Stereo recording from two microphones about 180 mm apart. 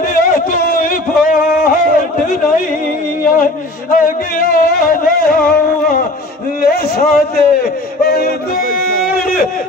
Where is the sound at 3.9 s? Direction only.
50° left (ahead or behind).